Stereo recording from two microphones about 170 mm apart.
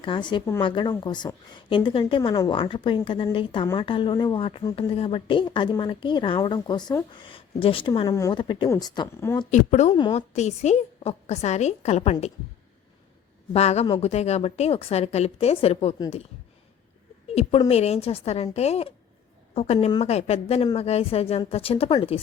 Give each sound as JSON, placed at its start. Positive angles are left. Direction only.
{"t": 0.0, "sound": "a woman's voice", "side_deg": 30}
{"t": 8.0, "sound": "speech", "side_deg": 20}
{"t": 8.3, "sound": "speech", "side_deg": 30}
{"t": 9.5, "sound": "speech", "side_deg": 45}
{"t": 9.9, "sound": "speech", "side_deg": 25}
{"t": 10.2, "sound": "a woman's voice", "side_deg": 40}
{"t": 13.5, "sound": "a woman's voice", "side_deg": 40}
{"t": 17.7, "sound": "a woman's voice", "side_deg": 40}